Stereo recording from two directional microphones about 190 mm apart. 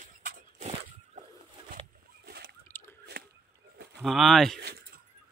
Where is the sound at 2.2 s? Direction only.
55° right (ahead or behind).